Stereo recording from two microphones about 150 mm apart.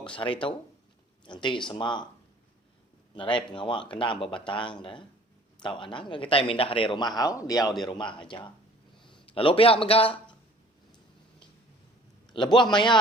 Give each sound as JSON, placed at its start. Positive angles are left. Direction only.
{"t": 0.0, "sound": "a man's voice", "side_deg": 35}
{"t": 3.2, "sound": "a man's voice", "side_deg": 35}
{"t": 12.3, "sound": "a man's voice", "side_deg": 30}